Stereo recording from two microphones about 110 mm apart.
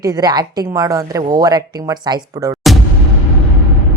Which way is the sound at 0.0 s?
35° right (ahead or behind).